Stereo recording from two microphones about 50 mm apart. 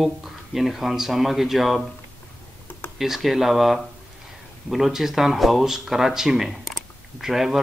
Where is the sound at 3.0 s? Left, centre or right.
Centre.